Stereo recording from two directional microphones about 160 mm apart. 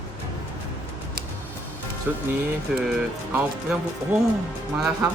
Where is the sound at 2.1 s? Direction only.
5° right (ahead or behind).